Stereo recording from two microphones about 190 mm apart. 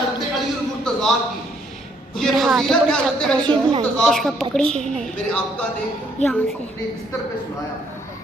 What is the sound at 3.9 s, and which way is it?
Speech, centre (ahead or behind).